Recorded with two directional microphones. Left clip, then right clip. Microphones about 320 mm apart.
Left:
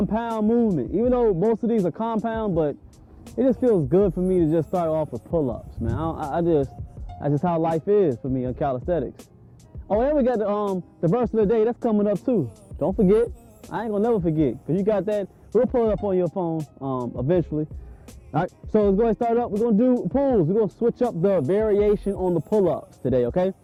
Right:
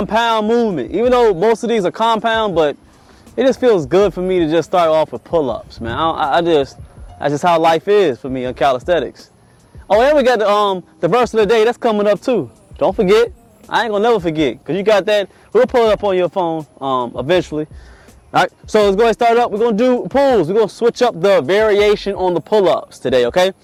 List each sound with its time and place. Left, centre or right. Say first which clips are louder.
0.0 s speech: right 11 dB; centre
5.4 s speech: right 8 dB; right
5.7 s speech: right 12 dB; centre